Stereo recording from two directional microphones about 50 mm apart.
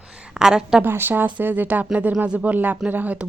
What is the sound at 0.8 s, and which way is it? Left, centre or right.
Speech, right.